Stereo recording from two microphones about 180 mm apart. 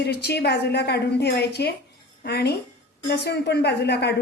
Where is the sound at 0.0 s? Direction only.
65° left (ahead or behind).